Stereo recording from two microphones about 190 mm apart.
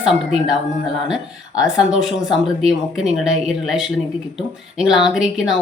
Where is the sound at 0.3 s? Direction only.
5° right (ahead or behind).